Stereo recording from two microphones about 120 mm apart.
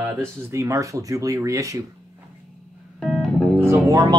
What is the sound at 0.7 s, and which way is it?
Speech, 25° right (ahead or behind).